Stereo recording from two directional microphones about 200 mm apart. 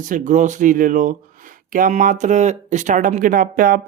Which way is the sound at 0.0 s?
40° right (ahead or behind).